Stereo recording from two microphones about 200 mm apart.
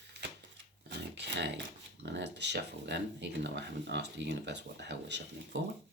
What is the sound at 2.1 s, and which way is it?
Speech, 60° right (ahead or behind).